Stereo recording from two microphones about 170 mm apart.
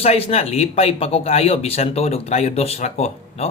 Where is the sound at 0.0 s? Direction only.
35° left (ahead or behind).